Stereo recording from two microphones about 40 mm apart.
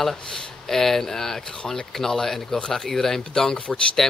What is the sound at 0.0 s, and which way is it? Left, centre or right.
A man's voice, centre.